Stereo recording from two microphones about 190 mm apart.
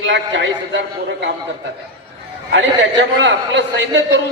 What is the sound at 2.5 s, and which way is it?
A man's voice, 75° right (ahead or behind).